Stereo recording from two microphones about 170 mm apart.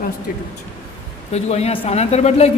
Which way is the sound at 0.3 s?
60° left (ahead or behind).